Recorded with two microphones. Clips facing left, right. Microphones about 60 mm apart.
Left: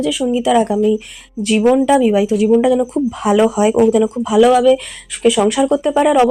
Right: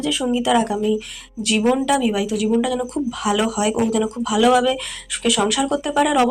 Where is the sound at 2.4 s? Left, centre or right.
Left.